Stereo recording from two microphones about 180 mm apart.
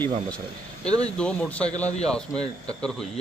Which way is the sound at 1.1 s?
5° left (ahead or behind).